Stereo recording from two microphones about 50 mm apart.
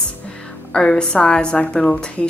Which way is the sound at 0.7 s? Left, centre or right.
Centre.